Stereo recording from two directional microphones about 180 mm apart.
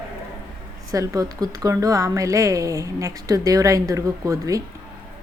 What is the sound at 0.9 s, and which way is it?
A woman's voice, 20° right (ahead or behind).